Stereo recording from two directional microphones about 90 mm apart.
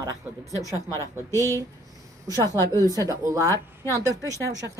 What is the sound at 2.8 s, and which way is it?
Speech, 40° right (ahead or behind).